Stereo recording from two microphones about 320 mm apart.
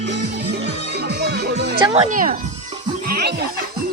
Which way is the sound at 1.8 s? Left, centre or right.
Centre.